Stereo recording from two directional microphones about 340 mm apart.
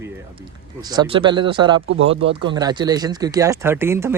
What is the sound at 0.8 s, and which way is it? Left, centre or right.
Speech, centre.